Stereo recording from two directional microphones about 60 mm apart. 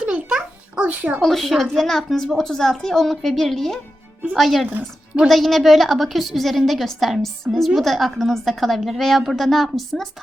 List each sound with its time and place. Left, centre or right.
0.0 s babbling: centre
1.2 s a woman's voice: centre